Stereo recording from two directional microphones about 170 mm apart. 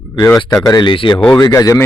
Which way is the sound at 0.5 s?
20° left (ahead or behind).